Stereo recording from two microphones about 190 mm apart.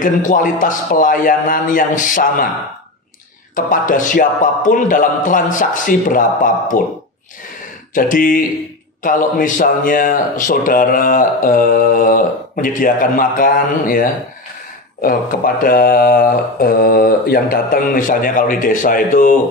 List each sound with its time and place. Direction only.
0.0 s mantra: 45° left (ahead or behind)
3.5 s mantra: 45° left (ahead or behind)
7.9 s mantra: 45° left (ahead or behind)